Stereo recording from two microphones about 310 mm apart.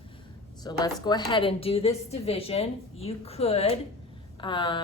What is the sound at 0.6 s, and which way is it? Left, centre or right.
A woman's voice, centre.